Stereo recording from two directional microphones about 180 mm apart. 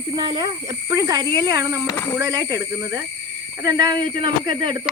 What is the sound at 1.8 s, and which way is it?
Speech, 15° left (ahead or behind).